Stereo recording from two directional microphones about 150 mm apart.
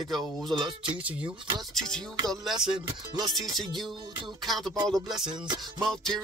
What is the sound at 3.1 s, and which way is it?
Music, 25° right (ahead or behind).